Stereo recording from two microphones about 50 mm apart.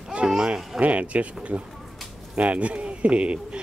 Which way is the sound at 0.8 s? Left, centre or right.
Right.